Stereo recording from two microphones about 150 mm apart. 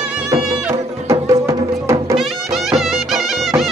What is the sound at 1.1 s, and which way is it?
Music, 20° right (ahead or behind).